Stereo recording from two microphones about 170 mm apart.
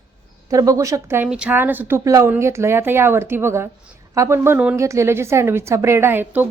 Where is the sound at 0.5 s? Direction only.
20° right (ahead or behind).